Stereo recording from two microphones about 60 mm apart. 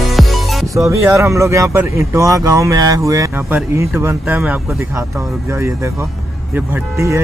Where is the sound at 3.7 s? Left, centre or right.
Right.